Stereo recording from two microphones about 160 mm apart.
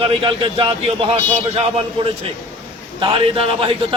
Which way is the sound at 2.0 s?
30° right (ahead or behind).